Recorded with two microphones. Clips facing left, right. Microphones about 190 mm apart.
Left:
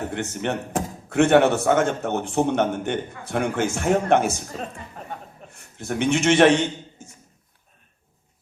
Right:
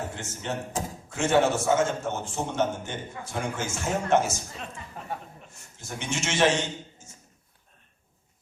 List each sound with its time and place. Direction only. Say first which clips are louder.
0.1 s speech: left 7 dB; 65° left (ahead or behind)
5.5 s a man's voice: left 12 dB; 60° left (ahead or behind)